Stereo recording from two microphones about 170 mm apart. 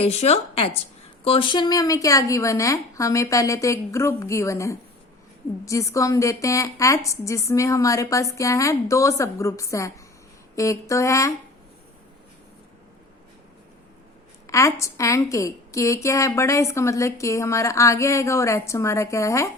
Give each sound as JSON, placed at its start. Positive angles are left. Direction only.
{"t": 0.0, "sound": "a woman's voice", "side_deg": 35}
{"t": 14.4, "sound": "a woman's voice", "side_deg": 20}